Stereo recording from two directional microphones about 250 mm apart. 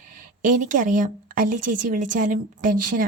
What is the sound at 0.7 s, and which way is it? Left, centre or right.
A woman's voice, right.